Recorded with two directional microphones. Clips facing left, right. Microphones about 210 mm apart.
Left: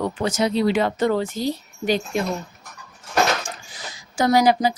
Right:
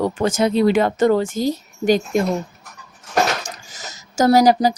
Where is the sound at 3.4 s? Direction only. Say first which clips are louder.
Even; 45° right (ahead or behind).